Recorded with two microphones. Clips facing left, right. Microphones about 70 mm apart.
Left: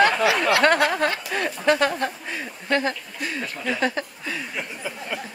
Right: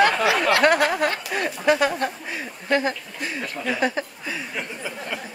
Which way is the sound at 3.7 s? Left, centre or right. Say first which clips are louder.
Right 1 dB; centre.